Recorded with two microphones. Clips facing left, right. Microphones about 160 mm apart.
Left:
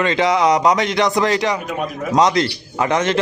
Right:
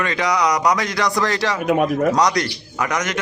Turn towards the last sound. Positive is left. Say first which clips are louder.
# left 5 dB
turn(degrees=30)  # may be behind; listen again after turning